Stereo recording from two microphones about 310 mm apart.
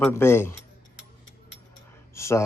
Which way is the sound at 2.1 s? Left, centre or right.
Centre.